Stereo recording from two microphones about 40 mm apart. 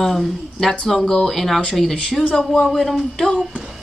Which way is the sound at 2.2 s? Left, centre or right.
Left.